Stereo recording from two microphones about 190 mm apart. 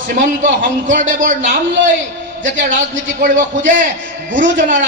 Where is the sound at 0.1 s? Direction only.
40° right (ahead or behind).